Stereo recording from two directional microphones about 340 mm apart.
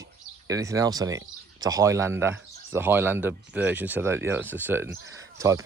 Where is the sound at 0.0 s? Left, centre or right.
Centre.